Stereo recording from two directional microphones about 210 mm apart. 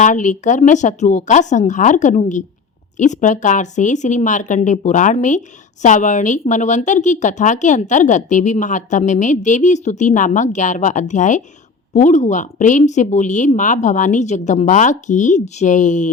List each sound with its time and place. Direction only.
0.0 s speech: 35° left (ahead or behind)